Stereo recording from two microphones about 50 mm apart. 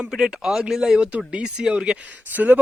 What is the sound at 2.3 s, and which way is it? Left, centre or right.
Speech, right.